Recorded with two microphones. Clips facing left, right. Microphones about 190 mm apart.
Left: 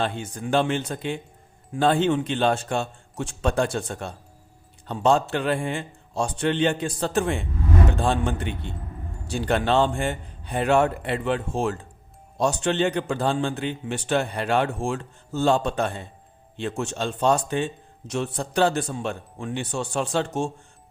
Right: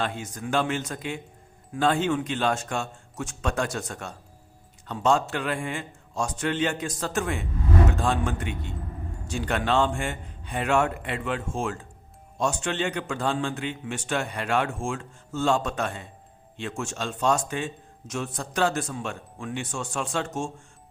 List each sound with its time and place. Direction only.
0.0 s a man's voice: 30° left (ahead or behind)